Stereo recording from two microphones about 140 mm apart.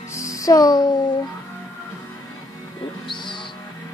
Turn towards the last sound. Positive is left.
turn(degrees=35)  # may be behind; listen again after turning